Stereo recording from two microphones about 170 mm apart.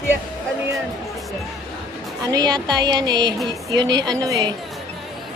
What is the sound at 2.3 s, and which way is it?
Speech, 25° right (ahead or behind).